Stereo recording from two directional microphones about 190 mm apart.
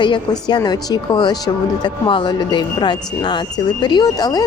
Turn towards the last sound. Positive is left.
turn(degrees=20)  # may be behind; listen again after turning